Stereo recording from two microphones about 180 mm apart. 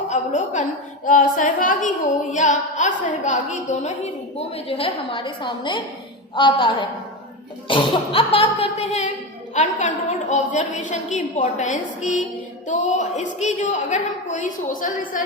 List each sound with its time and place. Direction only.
0.1 s a woman's voice: 40° left (ahead or behind)